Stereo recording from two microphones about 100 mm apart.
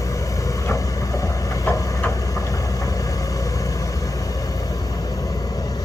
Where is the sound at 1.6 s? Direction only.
25° left (ahead or behind).